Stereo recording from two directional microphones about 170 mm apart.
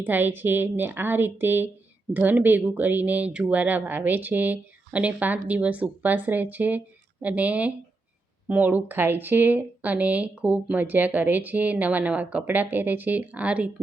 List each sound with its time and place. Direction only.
0.0 s speech: 10° right (ahead or behind)